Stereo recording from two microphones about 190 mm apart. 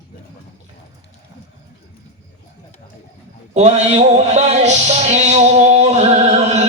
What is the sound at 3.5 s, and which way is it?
Music, 35° right (ahead or behind).